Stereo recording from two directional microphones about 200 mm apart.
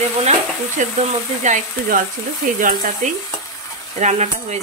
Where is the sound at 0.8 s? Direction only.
35° right (ahead or behind).